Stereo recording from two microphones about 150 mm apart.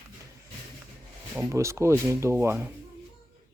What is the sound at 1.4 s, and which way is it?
Speech, 20° right (ahead or behind).